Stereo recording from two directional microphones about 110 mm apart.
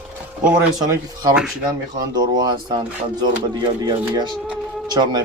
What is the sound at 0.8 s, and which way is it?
Speech, 35° right (ahead or behind).